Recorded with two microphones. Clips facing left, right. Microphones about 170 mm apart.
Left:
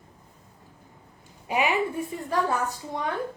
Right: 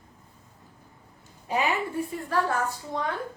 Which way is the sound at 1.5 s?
15° left (ahead or behind).